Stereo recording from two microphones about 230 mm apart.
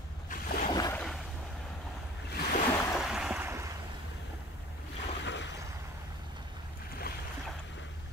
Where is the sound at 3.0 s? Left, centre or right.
Centre.